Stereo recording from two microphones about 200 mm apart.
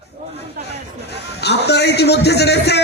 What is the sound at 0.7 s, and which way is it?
A man's voice, 55° left (ahead or behind).